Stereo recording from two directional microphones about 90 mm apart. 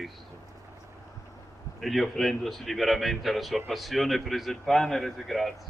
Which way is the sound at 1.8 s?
Centre (ahead or behind).